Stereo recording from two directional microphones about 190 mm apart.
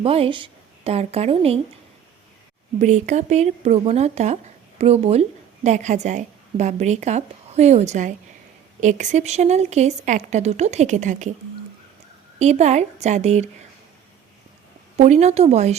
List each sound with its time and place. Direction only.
0.0 s a woman's voice: 30° right (ahead or behind)
2.7 s speech: 40° right (ahead or behind)
12.4 s speech: 35° right (ahead or behind)
14.9 s speech: 35° right (ahead or behind)